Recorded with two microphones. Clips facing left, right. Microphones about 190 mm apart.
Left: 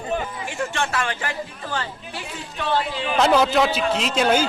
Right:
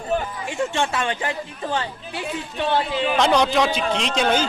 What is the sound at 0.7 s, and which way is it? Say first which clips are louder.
Speech: right 2 dB; 25° right (ahead or behind).